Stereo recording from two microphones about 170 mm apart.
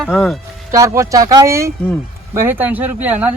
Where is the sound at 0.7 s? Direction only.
20° right (ahead or behind).